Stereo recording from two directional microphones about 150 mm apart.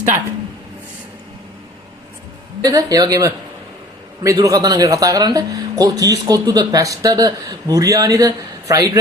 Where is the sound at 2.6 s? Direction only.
25° right (ahead or behind).